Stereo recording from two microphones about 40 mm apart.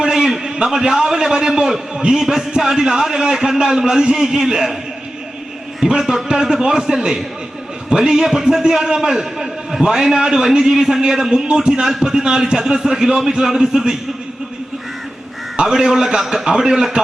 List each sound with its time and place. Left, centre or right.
0.0 s a man's voice: centre
5.8 s a man's voice: centre
15.6 s a man's voice: centre